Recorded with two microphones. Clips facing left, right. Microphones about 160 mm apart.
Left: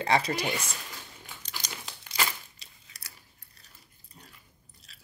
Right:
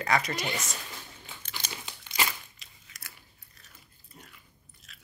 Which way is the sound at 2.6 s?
35° left (ahead or behind).